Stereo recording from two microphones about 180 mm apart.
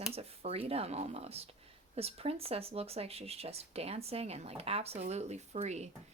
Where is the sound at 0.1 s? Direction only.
35° right (ahead or behind).